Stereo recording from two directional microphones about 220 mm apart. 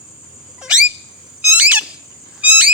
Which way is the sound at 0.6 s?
5° right (ahead or behind).